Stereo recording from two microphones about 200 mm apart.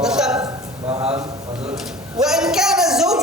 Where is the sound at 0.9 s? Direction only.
30° right (ahead or behind).